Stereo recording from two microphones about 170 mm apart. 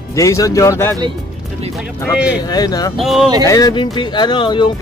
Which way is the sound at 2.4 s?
25° left (ahead or behind).